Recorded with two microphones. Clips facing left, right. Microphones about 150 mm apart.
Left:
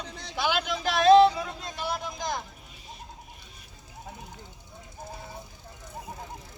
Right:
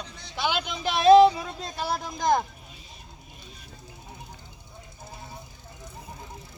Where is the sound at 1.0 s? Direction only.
10° right (ahead or behind).